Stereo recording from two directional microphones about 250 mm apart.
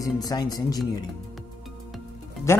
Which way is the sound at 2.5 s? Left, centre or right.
Centre.